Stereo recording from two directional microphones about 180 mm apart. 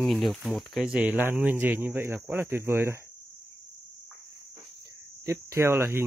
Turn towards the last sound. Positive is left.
turn(degrees=-15)  # may be behind; listen again after turning